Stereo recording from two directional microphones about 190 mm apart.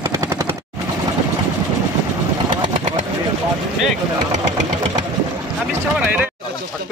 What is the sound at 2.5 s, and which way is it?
Vehicle, 25° right (ahead or behind).